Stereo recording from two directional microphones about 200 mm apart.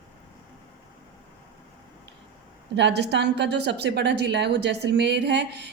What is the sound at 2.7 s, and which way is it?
A woman's voice, 60° right (ahead or behind).